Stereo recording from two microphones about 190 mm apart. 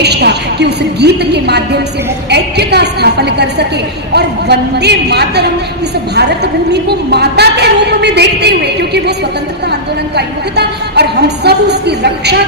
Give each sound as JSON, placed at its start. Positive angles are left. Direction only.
{"t": 0.0, "sound": "a woman's voice", "side_deg": -60}
{"t": 10.2, "sound": "a woman's voice", "side_deg": -60}